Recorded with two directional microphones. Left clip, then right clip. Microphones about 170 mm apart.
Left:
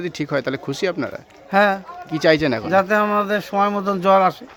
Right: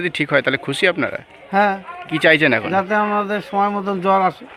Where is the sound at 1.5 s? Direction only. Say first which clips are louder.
Even; 35° left (ahead or behind).